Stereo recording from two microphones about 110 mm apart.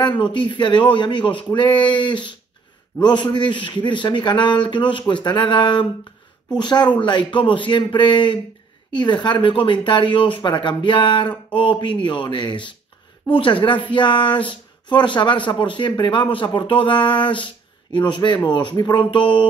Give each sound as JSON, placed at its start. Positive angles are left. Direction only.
{"t": 0.0, "sound": "speech", "side_deg": 45}